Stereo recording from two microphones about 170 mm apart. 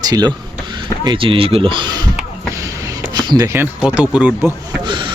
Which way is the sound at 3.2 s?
25° right (ahead or behind).